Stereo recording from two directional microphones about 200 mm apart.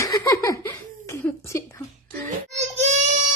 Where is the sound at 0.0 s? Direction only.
15° left (ahead or behind).